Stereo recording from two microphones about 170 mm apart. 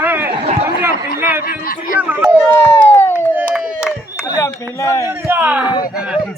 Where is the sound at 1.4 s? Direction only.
60° left (ahead or behind).